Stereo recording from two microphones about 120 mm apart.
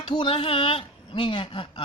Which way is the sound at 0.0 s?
45° left (ahead or behind).